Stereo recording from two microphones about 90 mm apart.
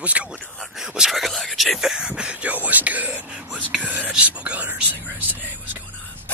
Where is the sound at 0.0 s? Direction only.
15° right (ahead or behind).